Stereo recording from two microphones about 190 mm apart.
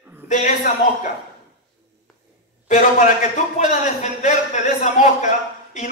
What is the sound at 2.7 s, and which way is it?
A man's voice, 45° left (ahead or behind).